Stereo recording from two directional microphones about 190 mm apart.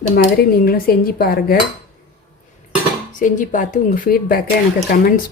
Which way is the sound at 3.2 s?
40° left (ahead or behind).